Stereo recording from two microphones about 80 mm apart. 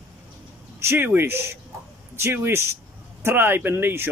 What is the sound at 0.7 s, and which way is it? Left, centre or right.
A man's voice, right.